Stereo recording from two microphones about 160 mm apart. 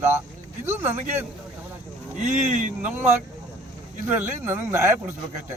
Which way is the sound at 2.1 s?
50° right (ahead or behind).